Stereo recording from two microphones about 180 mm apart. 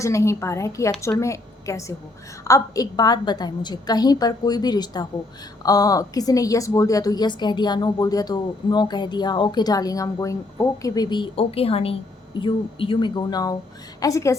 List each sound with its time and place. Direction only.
0.0 s a woman's voice: 15° left (ahead or behind)